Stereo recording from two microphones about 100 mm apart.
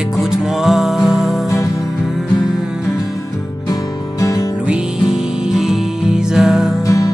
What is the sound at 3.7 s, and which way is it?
Music, 35° left (ahead or behind).